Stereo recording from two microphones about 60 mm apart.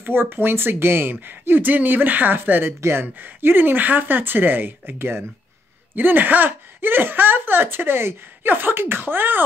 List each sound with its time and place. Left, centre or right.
0.0 s speech: right